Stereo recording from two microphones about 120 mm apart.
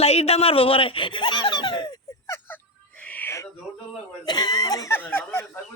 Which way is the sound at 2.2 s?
20° left (ahead or behind).